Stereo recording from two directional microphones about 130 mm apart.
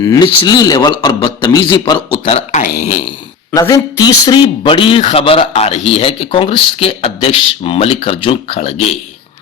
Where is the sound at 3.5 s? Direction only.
25° left (ahead or behind); by 8.9 s 50° left (ahead or behind).